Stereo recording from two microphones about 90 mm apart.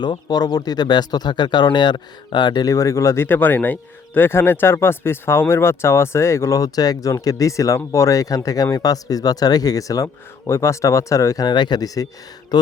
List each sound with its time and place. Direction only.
0.0 s speech: 50° left (ahead or behind)
2.6 s speech: 35° left (ahead or behind)
3.2 s speech: 20° left (ahead or behind)
11.4 s speech: 55° left (ahead or behind)